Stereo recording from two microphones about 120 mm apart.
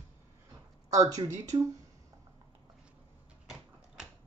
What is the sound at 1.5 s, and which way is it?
Speech, 40° right (ahead or behind).